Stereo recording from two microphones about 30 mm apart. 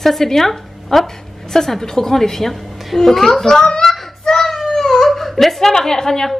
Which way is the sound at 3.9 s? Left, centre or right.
Centre.